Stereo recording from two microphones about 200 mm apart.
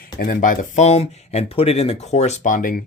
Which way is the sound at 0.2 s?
45° left (ahead or behind).